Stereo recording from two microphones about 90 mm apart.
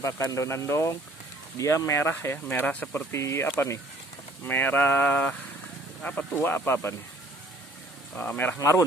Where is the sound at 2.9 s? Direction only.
30° left (ahead or behind).